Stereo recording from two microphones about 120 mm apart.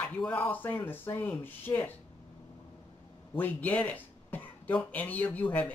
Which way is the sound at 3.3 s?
15° left (ahead or behind).